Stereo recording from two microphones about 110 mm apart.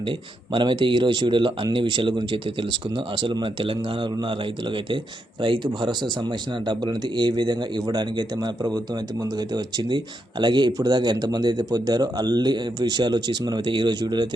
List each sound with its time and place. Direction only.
0.1 s speech: 50° right (ahead or behind)